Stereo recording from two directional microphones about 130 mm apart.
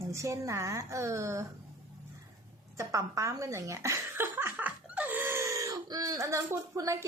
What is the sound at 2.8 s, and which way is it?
A woman's voice, 25° right (ahead or behind).